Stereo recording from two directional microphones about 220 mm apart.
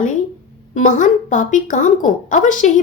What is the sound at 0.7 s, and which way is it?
A woman's voice, 35° left (ahead or behind).